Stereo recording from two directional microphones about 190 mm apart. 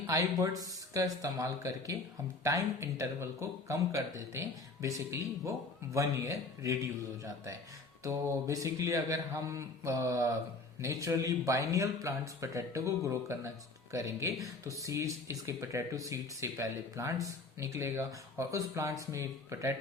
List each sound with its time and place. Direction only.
0.1 s speech: 20° right (ahead or behind)